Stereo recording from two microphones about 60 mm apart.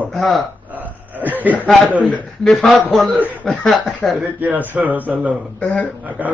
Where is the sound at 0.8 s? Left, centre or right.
Right.